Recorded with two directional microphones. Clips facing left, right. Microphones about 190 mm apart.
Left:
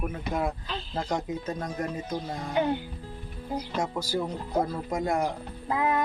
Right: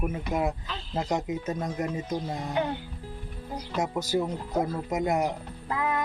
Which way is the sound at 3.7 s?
20° right (ahead or behind).